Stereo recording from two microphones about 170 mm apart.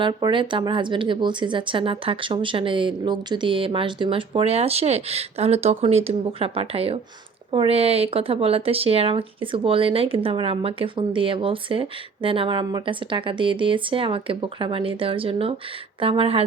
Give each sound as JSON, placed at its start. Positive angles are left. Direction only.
{"t": 0.0, "sound": "speech", "side_deg": -30}